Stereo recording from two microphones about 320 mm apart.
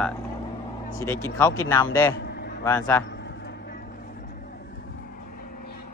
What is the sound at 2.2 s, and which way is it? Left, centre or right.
Vehicle, left.